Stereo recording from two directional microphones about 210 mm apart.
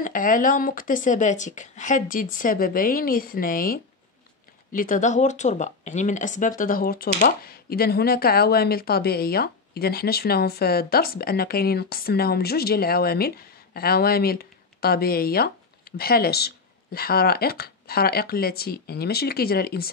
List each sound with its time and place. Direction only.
0.0 s speech: 40° left (ahead or behind)